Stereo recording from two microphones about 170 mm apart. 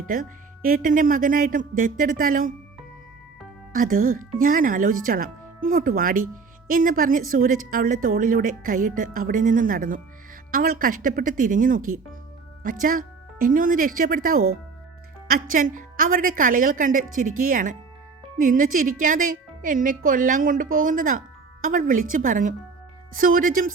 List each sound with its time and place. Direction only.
0.1 s speech: 55° right (ahead or behind)
3.7 s a woman's voice: 55° right (ahead or behind)